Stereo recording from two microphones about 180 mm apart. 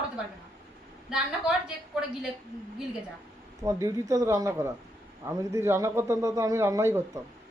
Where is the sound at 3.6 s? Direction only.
20° right (ahead or behind).